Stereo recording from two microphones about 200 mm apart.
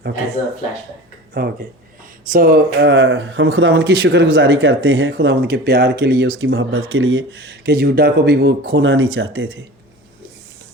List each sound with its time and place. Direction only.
1.4 s speech: 50° right (ahead or behind)
6.4 s speech: 75° right (ahead or behind)